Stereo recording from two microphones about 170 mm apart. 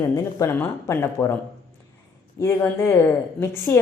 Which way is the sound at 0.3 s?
15° left (ahead or behind).